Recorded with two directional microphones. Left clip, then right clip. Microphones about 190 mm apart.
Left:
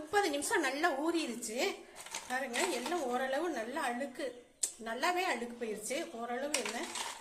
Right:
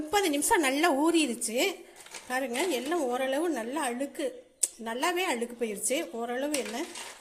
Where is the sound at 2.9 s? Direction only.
35° right (ahead or behind).